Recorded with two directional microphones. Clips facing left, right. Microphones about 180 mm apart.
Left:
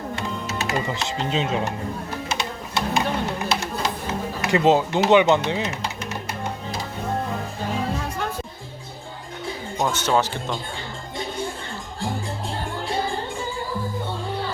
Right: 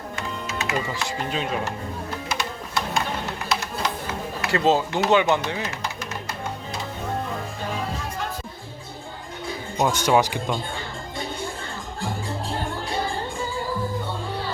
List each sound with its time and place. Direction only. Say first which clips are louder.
0.2 s music: right 1 dB; 35° left (ahead or behind)
0.9 s speech: left 2 dB; 20° left (ahead or behind)
2.4 s music: left 2 dB; 20° left (ahead or behind)
3.5 s a sound: left 1 dB; 25° left (ahead or behind)
5.5 s speech: left 4 dB; 20° left (ahead or behind)
9.7 s speech: right 2 dB; 10° right (ahead or behind)